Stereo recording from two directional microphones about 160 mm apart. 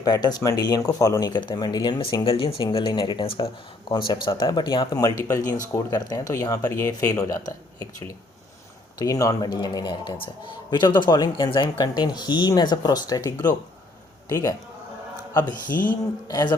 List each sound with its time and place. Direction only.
0.0 s speech: 25° left (ahead or behind)
15.7 s speech: 10° left (ahead or behind)
16.3 s speech: 25° left (ahead or behind)